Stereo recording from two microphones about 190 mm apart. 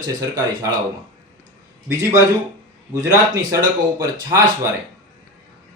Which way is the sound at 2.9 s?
20° right (ahead or behind).